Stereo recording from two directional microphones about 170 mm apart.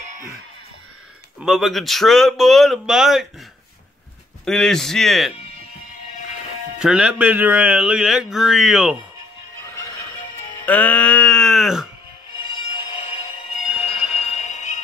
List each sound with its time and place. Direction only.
1.4 s speech: centre (ahead or behind)
4.5 s speech: 5° left (ahead or behind)
6.8 s speech: 5° right (ahead or behind)
10.6 s music: 10° left (ahead or behind)
12.7 s music: 30° left (ahead or behind)
13.7 s fire alarm: 5° right (ahead or behind)
14.3 s music: 45° left (ahead or behind)